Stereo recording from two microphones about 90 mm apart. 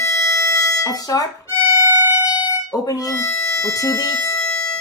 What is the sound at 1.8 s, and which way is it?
Music, 25° right (ahead or behind).